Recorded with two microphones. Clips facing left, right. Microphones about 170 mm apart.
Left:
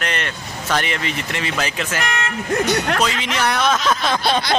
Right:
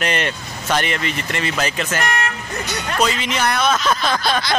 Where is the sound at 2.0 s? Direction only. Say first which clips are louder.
Right 3 dB; 40° right (ahead or behind).